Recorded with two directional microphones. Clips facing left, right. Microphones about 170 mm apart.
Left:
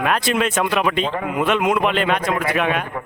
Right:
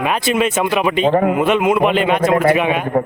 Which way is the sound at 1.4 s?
Centre (ahead or behind).